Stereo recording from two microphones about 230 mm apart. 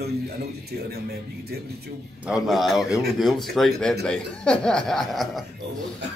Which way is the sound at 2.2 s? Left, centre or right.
Centre.